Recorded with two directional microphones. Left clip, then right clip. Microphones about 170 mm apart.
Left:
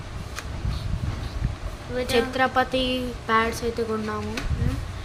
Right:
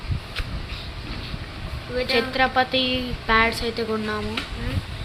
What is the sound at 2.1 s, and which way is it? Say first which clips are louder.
A woman's voice: right 1 dB; 5° right (ahead or behind).